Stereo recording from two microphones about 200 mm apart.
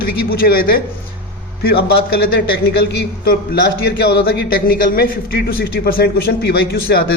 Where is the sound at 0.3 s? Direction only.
50° left (ahead or behind).